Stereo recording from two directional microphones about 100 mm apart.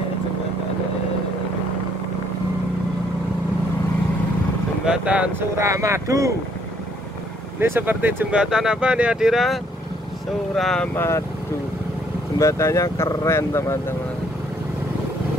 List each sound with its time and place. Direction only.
4.8 s speech: 10° right (ahead or behind)
5.6 s speech: 30° right (ahead or behind)
7.6 s speech: 20° right (ahead or behind)
8.3 s speech: 5° right (ahead or behind)
11.0 s speech: 25° left (ahead or behind)
12.4 s speech: 30° left (ahead or behind)